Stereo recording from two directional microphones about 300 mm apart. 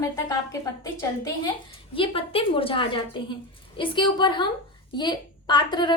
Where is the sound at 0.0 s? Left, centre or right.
Centre.